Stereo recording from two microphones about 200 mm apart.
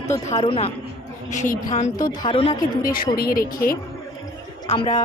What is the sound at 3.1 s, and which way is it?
Speech, 50° left (ahead or behind).